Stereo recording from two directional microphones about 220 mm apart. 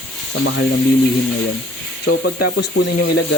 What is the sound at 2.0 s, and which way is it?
Speech, 50° left (ahead or behind).